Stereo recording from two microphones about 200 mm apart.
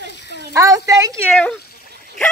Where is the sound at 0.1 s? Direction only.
60° left (ahead or behind).